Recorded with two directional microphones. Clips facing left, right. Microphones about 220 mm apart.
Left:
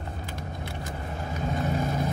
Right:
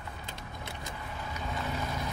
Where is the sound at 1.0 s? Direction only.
45° left (ahead or behind).